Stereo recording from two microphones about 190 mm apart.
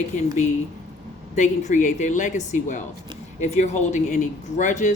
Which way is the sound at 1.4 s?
40° left (ahead or behind).